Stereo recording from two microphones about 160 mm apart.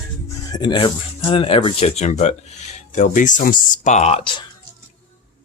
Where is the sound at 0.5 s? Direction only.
30° left (ahead or behind).